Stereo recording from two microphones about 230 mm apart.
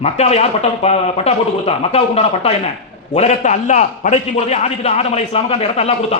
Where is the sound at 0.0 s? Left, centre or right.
Left.